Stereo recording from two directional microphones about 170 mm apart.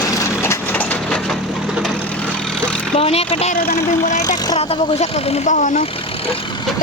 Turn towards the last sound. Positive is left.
turn(degrees=50)  # may be behind; listen again after turning